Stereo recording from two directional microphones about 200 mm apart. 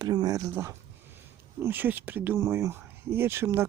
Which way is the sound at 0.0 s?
20° right (ahead or behind).